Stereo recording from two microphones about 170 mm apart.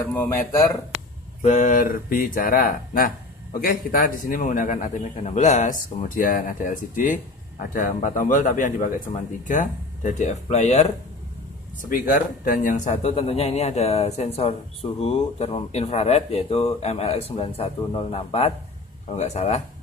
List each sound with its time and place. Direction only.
0.1 s speech: 15° left (ahead or behind)
1.4 s a man's voice: 45° left (ahead or behind)
11.8 s speech: 50° left (ahead or behind)